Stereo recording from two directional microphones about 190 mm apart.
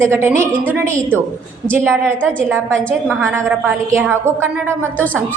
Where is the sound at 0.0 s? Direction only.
15° right (ahead or behind).